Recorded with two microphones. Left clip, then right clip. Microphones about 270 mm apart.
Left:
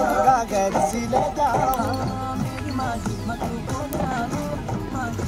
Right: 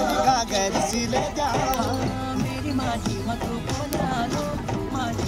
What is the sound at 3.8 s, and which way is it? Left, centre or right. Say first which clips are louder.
Music: even; centre.